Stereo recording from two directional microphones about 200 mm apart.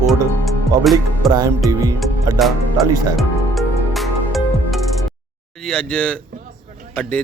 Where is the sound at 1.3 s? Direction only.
20° right (ahead or behind).